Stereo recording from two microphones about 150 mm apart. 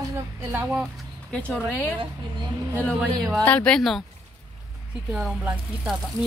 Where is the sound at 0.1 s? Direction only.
15° right (ahead or behind).